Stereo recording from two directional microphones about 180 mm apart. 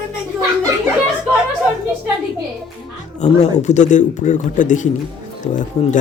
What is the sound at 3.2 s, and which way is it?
A man's voice, 40° left (ahead or behind).